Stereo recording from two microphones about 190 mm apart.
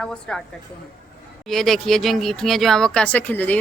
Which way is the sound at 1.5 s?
Centre (ahead or behind).